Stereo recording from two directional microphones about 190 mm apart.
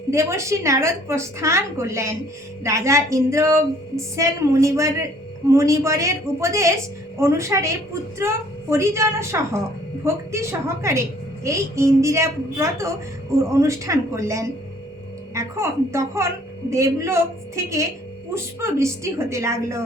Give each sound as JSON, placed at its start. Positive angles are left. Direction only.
{"t": 0.1, "sound": "a woman's voice", "side_deg": -15}
{"t": 8.7, "sound": "a woman's voice", "side_deg": -15}